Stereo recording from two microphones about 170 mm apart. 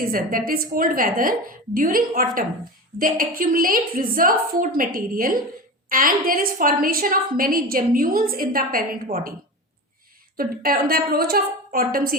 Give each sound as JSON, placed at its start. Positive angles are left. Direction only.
{"t": 0.0, "sound": "a woman's voice", "side_deg": -60}
{"t": 10.3, "sound": "a woman's voice", "side_deg": -60}